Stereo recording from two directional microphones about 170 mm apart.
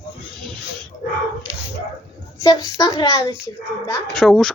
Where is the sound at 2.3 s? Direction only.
20° left (ahead or behind).